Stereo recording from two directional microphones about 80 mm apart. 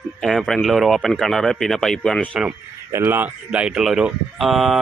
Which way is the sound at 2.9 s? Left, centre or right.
Right.